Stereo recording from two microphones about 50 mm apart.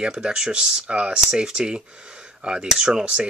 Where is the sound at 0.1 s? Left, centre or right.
Centre.